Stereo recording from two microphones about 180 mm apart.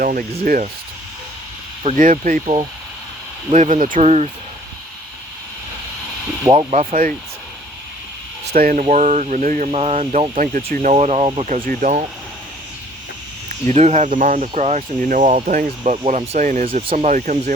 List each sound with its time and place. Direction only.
0.0 s speech: 50° right (ahead or behind)
2.0 s speech: 50° right (ahead or behind)
3.5 s speech: 45° right (ahead or behind)
6.5 s speech: 30° right (ahead or behind)
6.7 s speech: 40° right (ahead or behind)
8.5 s speech: 50° right (ahead or behind)
8.8 s speech: 40° right (ahead or behind)
10.9 s speech: 35° right (ahead or behind)
13.5 s speech: 40° right (ahead or behind)